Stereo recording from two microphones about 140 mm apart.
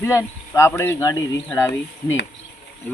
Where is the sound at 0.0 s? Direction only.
20° left (ahead or behind).